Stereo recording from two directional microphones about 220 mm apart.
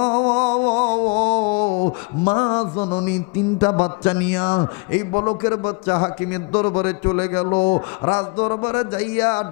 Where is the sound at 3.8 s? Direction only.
10° left (ahead or behind).